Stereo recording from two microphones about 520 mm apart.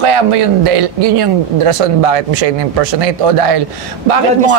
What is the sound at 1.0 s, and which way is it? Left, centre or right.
Speech, right.